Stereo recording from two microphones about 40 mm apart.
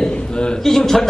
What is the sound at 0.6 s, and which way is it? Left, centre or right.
Speech, centre.